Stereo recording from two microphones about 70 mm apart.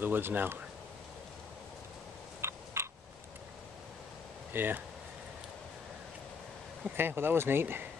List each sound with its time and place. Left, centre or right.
0.0 s speech: right
2.4 s a sound: right
4.5 s speech: right
7.0 s speech: right